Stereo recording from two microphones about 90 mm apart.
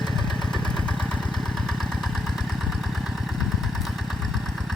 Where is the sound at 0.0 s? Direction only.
5° left (ahead or behind).